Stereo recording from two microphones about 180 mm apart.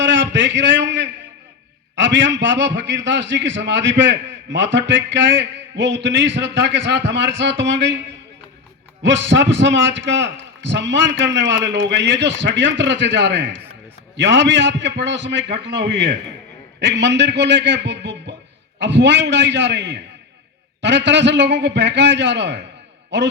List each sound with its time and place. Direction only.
0.0 s a man's voice: 90° right
9.0 s a man's voice: 90° right